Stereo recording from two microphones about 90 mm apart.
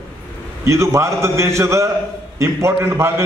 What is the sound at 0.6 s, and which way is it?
A man's voice, 30° right (ahead or behind).